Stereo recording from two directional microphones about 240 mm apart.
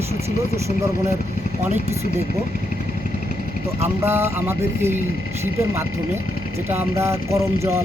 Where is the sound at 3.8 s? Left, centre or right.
Centre.